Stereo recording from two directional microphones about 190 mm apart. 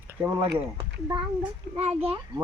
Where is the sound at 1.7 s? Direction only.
30° right (ahead or behind).